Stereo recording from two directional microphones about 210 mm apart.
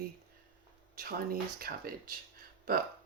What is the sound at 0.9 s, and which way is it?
Speech, 45° right (ahead or behind).